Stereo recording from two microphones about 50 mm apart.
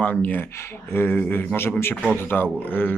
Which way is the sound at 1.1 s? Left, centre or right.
Left.